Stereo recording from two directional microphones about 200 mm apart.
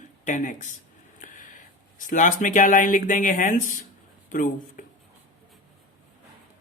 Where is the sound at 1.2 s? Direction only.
40° left (ahead or behind).